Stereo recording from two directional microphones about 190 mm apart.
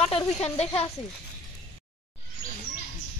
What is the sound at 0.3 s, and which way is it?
Speech, 35° left (ahead or behind).